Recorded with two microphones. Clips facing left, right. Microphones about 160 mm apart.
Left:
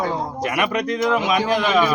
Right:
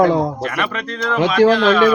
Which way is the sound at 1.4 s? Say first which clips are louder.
Right 8 dB; 90° right.